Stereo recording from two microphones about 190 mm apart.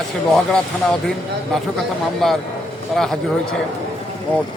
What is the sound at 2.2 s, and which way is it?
Speech, centre (ahead or behind).